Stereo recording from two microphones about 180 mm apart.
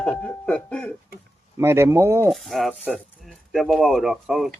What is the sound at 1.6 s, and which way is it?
Speech, 15° right (ahead or behind).